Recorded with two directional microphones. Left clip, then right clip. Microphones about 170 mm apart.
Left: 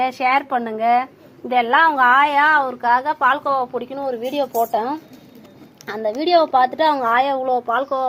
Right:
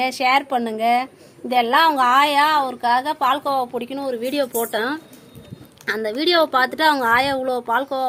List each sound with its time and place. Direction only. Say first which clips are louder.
0.0 s a woman's voice: even; 20° right (ahead or behind); by 4.6 s 35° right (ahead or behind)
5.8 s a woman's voice: right 1 dB; 35° right (ahead or behind)